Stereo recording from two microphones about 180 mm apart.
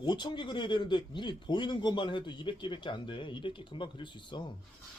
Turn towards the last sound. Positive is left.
turn(degrees=25)  # may be behind; listen again after turning